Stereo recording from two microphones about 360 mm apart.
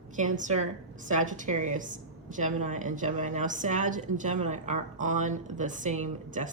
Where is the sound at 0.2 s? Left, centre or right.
Centre.